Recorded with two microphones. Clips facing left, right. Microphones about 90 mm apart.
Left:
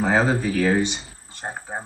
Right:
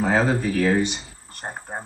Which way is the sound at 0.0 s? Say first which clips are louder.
Even; 5° left (ahead or behind).